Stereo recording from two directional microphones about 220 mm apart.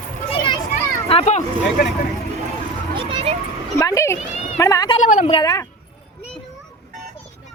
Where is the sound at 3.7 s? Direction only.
15° left (ahead or behind).